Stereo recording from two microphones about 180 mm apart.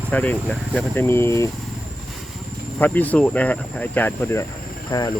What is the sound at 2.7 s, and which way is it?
Speech, 10° left (ahead or behind).